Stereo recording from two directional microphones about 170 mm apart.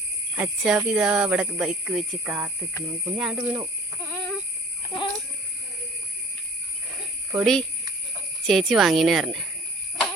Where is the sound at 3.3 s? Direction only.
20° right (ahead or behind).